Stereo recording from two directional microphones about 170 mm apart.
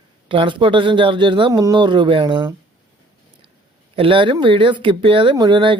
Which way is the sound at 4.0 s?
30° right (ahead or behind).